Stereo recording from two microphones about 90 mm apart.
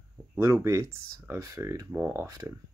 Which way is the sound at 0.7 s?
35° right (ahead or behind).